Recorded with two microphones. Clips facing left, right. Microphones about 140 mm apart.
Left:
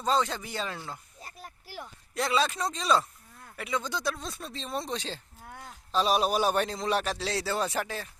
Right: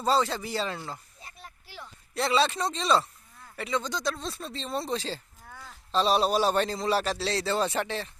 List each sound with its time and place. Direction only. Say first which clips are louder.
0.0 s speech: right 2 dB; centre (ahead or behind)
1.2 s a sound: left 2 dB; 40° left (ahead or behind)
2.1 s speech: right 2 dB; centre (ahead or behind)